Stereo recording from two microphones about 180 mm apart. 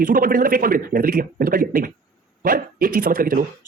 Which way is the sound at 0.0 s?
50° right (ahead or behind).